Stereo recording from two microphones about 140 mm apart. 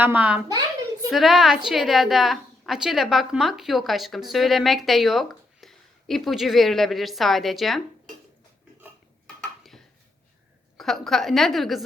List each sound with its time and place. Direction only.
0.0 s a child's voice: 10° right (ahead or behind)
10.8 s a woman's voice: centre (ahead or behind)